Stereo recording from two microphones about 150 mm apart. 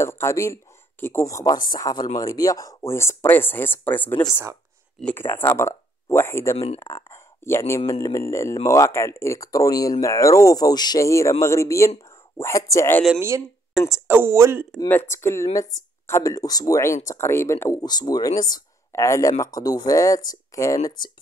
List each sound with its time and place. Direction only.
0.0 s speech: 15° left (ahead or behind)
14.0 s speech: 15° right (ahead or behind)
14.9 s speech: 15° left (ahead or behind)